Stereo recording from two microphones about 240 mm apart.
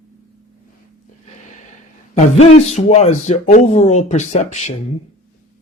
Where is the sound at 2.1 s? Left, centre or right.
Left.